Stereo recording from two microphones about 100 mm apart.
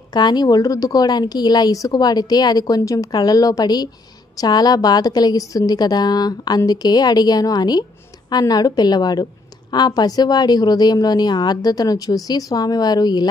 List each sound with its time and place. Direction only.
0.1 s a woman's voice: 45° left (ahead or behind)